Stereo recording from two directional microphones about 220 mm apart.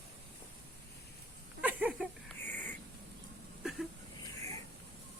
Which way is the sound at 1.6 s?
5° right (ahead or behind).